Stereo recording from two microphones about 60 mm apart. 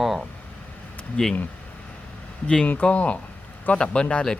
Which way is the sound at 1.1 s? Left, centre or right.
Centre.